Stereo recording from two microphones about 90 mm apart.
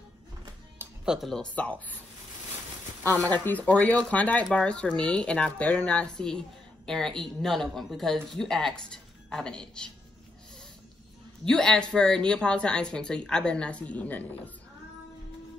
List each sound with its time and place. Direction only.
1.0 s speech: 5° right (ahead or behind)
1.3 s a woman's voice: 10° left (ahead or behind)
3.2 s a woman's voice: 20° left (ahead or behind)
11.4 s a woman's voice: 5° left (ahead or behind)